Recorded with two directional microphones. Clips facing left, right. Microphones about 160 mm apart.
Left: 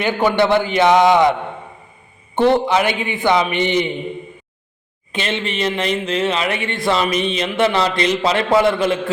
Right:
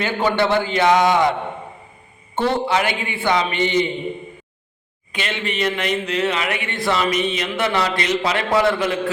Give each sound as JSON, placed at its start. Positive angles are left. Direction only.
{"t": 0.0, "sound": "a man's voice", "side_deg": 15}
{"t": 5.2, "sound": "a man's voice", "side_deg": 25}